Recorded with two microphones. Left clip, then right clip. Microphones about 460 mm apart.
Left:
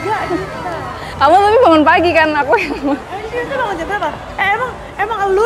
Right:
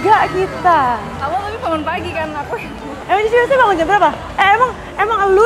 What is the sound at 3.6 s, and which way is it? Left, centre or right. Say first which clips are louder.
Speech: right 7 dB; right.